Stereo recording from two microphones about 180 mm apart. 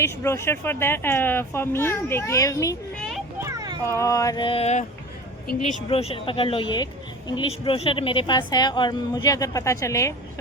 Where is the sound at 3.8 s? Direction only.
15° left (ahead or behind).